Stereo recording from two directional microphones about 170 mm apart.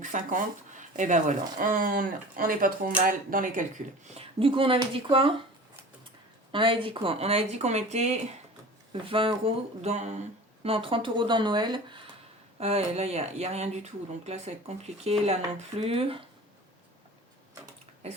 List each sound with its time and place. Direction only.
0.0 s speech: 50° right (ahead or behind)
4.1 s speech: 35° right (ahead or behind)
6.5 s speech: 30° right (ahead or behind)